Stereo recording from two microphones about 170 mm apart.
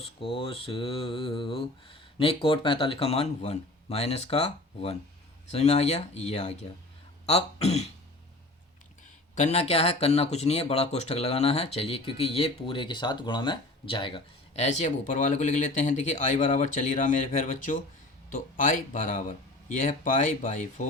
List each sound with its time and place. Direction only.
0.0 s speech: 30° left (ahead or behind)
9.3 s speech: 40° left (ahead or behind)